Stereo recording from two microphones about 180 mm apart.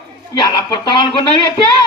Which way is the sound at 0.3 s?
25° left (ahead or behind).